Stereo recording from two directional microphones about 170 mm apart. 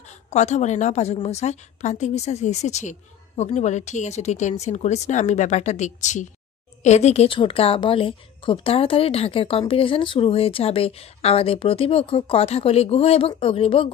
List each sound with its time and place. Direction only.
0.3 s a woman's voice: 40° left (ahead or behind)